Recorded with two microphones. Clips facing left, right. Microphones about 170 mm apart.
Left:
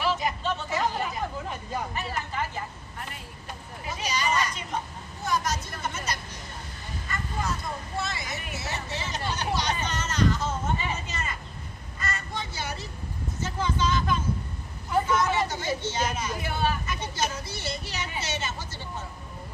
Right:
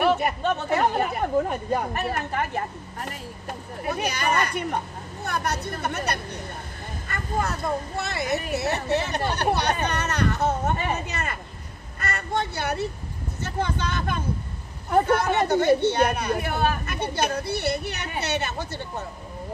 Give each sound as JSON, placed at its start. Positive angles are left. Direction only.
{"t": 0.0, "sound": "a woman's voice", "side_deg": -55}